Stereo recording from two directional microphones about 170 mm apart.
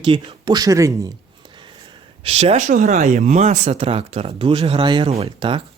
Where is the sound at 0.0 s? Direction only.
30° right (ahead or behind).